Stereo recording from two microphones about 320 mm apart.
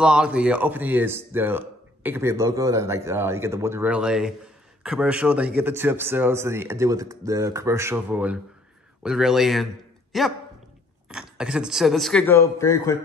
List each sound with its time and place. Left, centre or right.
0.0 s speech: centre